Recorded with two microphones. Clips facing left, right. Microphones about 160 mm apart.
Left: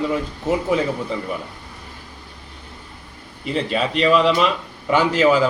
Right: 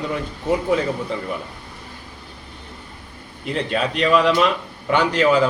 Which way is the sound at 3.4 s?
Centre (ahead or behind).